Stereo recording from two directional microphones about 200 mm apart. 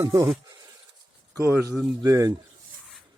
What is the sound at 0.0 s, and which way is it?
Speech, 15° right (ahead or behind).